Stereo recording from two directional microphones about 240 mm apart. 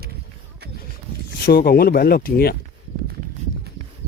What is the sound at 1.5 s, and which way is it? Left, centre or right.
Speech, left.